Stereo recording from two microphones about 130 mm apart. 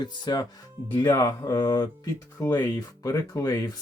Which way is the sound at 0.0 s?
30° left (ahead or behind).